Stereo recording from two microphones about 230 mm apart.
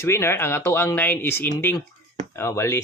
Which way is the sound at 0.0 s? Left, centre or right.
Centre.